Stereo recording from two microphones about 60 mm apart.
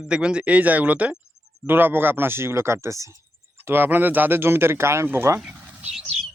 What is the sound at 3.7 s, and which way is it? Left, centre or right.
Speech, right.